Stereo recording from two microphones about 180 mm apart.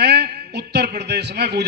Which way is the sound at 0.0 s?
70° right (ahead or behind).